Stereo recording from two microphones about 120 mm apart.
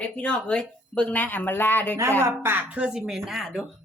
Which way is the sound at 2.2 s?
20° right (ahead or behind).